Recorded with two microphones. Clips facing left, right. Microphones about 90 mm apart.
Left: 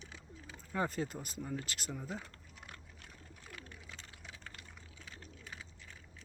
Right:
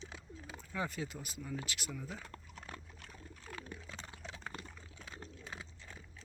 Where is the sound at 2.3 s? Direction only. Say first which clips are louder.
Right 5 dB; 30° right (ahead or behind).